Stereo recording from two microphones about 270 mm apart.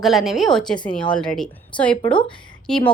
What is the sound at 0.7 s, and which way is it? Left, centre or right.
Speech, centre.